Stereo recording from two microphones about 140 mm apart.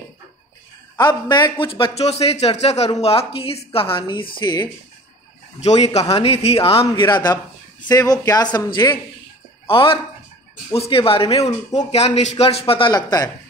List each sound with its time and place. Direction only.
0.9 s a man's voice: 30° left (ahead or behind)
5.6 s a man's voice: 50° left (ahead or behind)
7.1 s a man's voice: 30° left (ahead or behind)